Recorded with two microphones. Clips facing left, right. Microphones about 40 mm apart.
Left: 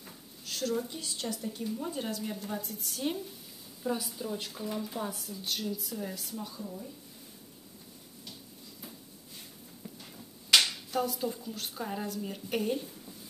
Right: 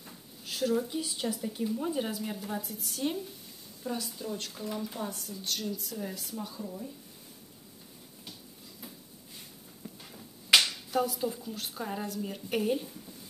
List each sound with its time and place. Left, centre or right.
0.5 s a woman's voice: centre
9.9 s a sound: centre
10.6 s speech: centre